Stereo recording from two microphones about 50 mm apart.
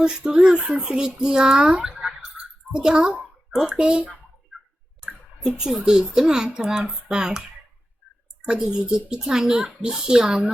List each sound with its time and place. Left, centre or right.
0.0 s a child's voice: centre
5.5 s a child's voice: centre
8.4 s a child's voice: centre